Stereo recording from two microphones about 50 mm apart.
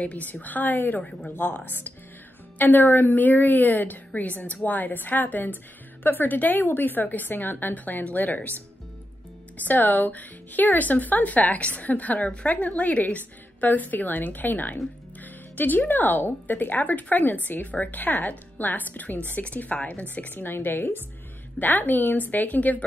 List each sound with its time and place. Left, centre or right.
0.0 s speech: left
9.6 s speech: left